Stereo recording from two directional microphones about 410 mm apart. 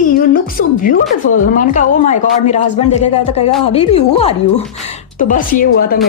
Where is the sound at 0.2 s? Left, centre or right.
Left.